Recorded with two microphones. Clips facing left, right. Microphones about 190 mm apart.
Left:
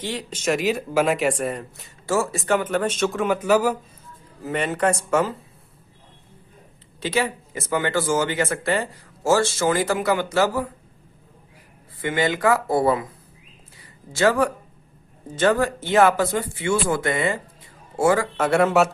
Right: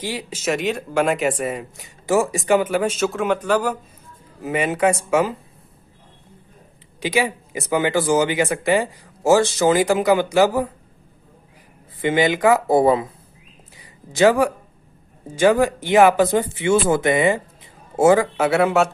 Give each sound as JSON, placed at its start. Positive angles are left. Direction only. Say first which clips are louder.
{"t": 0.0, "sound": "speech", "louder": "right 1 dB", "side_deg": -10}
{"t": 1.7, "sound": "speech", "louder": "right 7 dB", "side_deg": -15}
{"t": 4.4, "sound": "speech", "louder": "right 3 dB", "side_deg": -10}
{"t": 7.0, "sound": "speech", "louder": "right 2 dB", "side_deg": -15}
{"t": 12.0, "sound": "speech", "louder": "right 4 dB", "side_deg": -15}
{"t": 13.7, "sound": "a sound", "louder": "right 5 dB", "side_deg": -15}
{"t": 15.4, "sound": "a man's voice", "louder": "right 4 dB", "side_deg": -10}
{"t": 18.3, "sound": "speech", "louder": "right 1 dB", "side_deg": -5}